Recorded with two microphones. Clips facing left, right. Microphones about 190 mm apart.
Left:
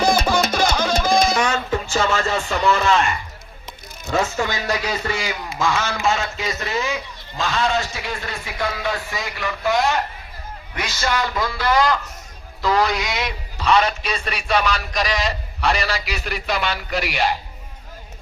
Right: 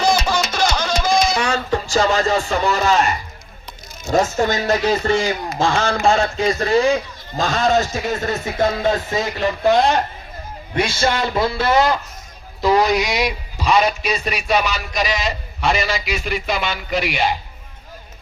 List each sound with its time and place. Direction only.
0.0 s music: 55° left (ahead or behind)
1.4 s a sound: 35° right (ahead or behind)
4.1 s speech: 40° right (ahead or behind)
5.1 s speech: 30° right (ahead or behind)
6.6 s a man's voice: 30° right (ahead or behind); by 17.2 s centre (ahead or behind)